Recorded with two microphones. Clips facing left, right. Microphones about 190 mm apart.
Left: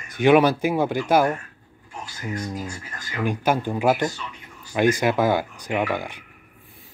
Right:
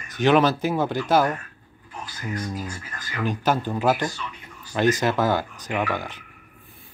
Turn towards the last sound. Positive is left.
turn(degrees=15)  # may be behind; listen again after turning